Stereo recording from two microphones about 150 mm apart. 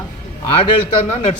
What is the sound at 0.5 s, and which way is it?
Speech, 35° left (ahead or behind).